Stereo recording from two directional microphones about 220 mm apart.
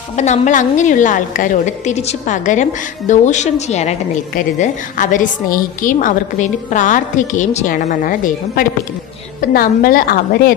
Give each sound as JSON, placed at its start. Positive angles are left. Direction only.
{"t": 0.2, "sound": "a woman's voice", "side_deg": 35}